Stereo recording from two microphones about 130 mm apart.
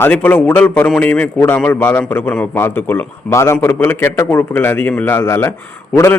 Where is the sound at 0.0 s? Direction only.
10° left (ahead or behind).